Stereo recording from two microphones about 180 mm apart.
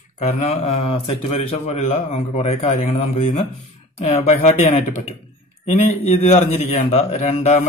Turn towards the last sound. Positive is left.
turn(degrees=40)  # may be behind; listen again after turning